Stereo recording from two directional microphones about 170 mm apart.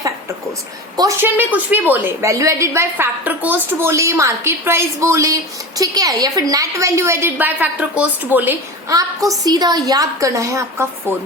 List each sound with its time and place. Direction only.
0.9 s a woman's voice: 15° right (ahead or behind)
8.9 s a woman's voice: 20° right (ahead or behind)